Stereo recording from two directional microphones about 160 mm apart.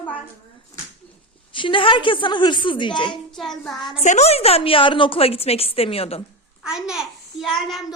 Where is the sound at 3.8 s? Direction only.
30° left (ahead or behind).